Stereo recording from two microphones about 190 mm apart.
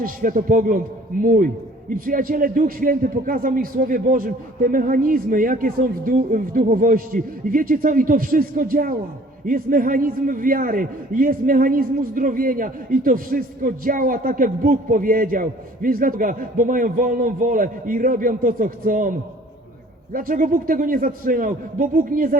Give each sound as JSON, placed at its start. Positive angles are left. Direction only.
{"t": 0.0, "sound": "a man's voice", "side_deg": -45}
{"t": 20.1, "sound": "a man's voice", "side_deg": -50}